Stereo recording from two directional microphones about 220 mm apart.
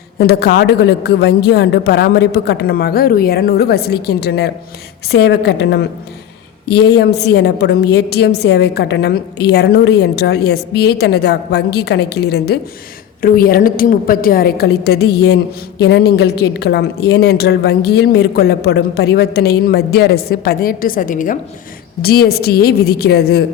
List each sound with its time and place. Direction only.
0.2 s a woman's voice: 45° left (ahead or behind)